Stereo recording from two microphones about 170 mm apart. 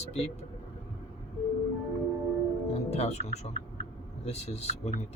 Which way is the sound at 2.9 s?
40° left (ahead or behind).